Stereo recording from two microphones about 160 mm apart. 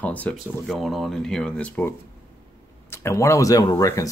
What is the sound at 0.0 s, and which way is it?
Speech, 10° left (ahead or behind).